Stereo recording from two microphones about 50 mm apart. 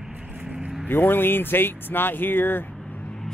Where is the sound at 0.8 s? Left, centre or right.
Left.